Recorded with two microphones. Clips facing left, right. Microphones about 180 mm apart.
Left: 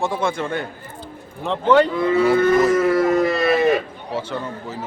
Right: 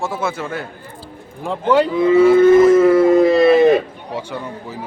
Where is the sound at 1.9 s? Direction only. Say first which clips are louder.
Right 5 dB; 20° right (ahead or behind).